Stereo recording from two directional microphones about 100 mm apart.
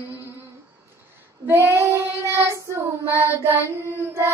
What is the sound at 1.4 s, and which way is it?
Child singing, 25° right (ahead or behind).